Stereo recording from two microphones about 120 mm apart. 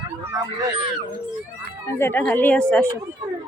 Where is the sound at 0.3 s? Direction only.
25° right (ahead or behind).